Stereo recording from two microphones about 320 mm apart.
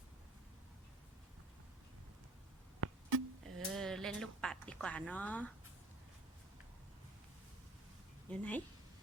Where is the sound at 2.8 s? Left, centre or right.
Right.